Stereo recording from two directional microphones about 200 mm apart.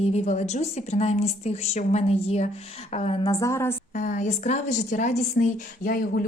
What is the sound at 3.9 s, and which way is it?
A woman's voice, 40° left (ahead or behind).